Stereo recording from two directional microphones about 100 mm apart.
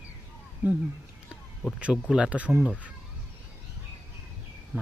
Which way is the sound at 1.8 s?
10° right (ahead or behind).